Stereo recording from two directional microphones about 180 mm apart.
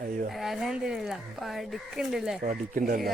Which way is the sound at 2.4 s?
60° right (ahead or behind).